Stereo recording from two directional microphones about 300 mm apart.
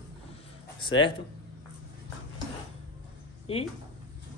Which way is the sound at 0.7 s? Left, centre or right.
Centre.